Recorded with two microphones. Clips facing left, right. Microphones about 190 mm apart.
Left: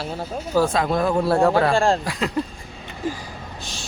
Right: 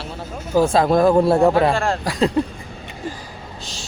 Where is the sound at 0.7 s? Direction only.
35° right (ahead or behind).